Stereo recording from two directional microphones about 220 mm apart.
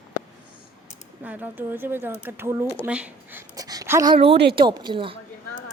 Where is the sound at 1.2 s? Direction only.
10° right (ahead or behind).